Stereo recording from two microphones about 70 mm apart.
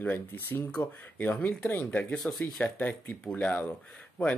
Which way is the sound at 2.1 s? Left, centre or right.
Centre.